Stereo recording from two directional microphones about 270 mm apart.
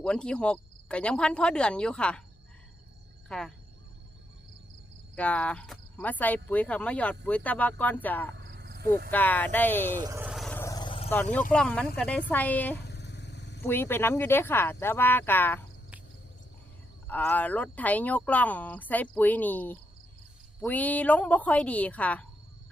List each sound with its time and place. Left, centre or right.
0.0 s speech: centre
3.2 s speech: centre
5.1 s speech: centre
8.4 s cricket: right
9.0 s speech: centre
10.0 s vehicle: centre
11.1 s speech: centre
12.8 s vehicle: left
13.6 s speech: centre
17.1 s speech: centre